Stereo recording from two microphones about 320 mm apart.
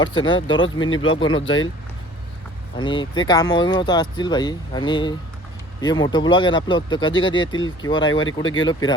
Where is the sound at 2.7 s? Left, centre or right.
Centre.